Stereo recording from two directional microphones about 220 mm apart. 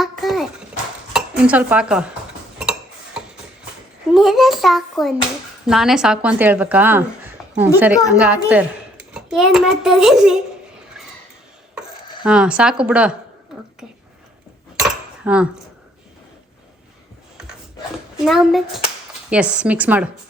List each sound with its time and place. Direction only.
0.0 s a sound: centre (ahead or behind)
1.1 s speech: 5° right (ahead or behind)
4.1 s a woman's voice: centre (ahead or behind)
12.2 s a woman's voice: 5° right (ahead or behind)
13.5 s whispering: 5° right (ahead or behind)
14.8 s cutlery: 5° right (ahead or behind)
18.3 s a woman's voice: centre (ahead or behind)